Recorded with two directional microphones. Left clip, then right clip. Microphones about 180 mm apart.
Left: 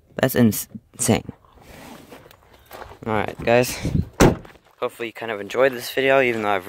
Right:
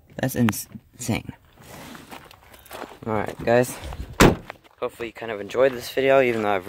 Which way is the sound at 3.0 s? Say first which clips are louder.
Left 3 dB; 10° left (ahead or behind).